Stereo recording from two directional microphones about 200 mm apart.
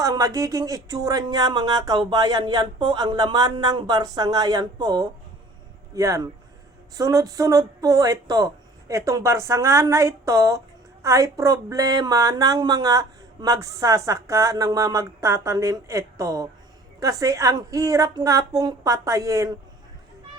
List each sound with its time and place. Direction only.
0.0 s speech: 15° right (ahead or behind)